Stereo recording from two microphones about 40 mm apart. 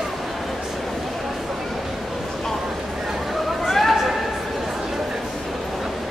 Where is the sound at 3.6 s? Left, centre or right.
Centre.